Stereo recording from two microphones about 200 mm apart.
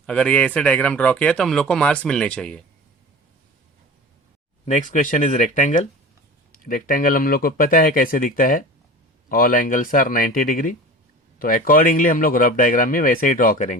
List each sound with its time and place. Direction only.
0.0 s speech: 5° left (ahead or behind)
4.6 s speech: 40° left (ahead or behind)